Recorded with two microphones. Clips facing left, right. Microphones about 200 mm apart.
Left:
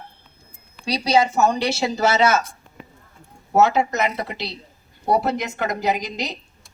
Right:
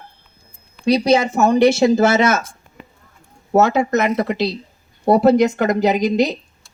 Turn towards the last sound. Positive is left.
turn(degrees=-50)  # may be behind; listen again after turning